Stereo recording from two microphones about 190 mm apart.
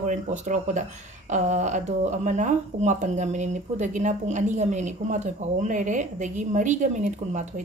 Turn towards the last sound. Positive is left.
turn(degrees=-40)  # may be behind; listen again after turning